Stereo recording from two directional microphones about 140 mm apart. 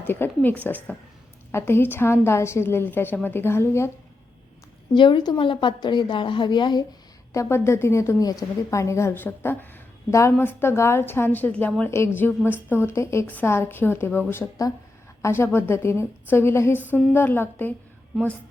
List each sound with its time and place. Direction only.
0.0 s a woman's voice: 15° left (ahead or behind)
4.9 s a woman's voice: 35° left (ahead or behind)
7.3 s a woman's voice: 20° left (ahead or behind)